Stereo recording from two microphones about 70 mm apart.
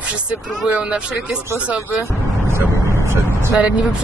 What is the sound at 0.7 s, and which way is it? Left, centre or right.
Speech, centre.